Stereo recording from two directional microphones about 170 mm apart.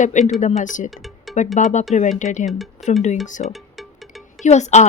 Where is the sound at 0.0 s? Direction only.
45° left (ahead or behind).